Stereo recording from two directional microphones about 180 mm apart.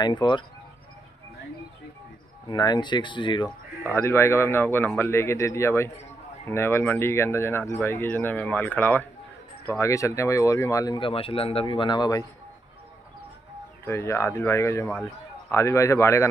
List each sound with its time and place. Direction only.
0.0 s speech: 25° left (ahead or behind)
2.5 s speech: 25° left (ahead or behind)
3.9 s speech: 15° left (ahead or behind)
13.8 s speech: 15° left (ahead or behind)